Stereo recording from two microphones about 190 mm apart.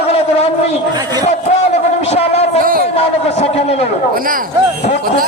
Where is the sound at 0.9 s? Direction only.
20° right (ahead or behind).